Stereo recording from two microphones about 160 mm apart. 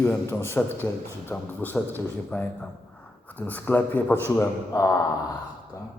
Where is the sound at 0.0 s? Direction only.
15° left (ahead or behind).